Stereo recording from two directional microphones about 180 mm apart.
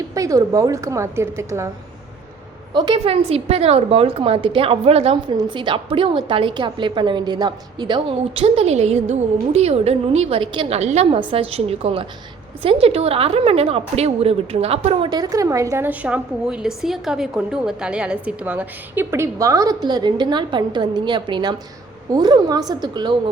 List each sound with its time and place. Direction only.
0.1 s a woman's voice: 20° right (ahead or behind)
2.7 s a woman's voice: 25° right (ahead or behind)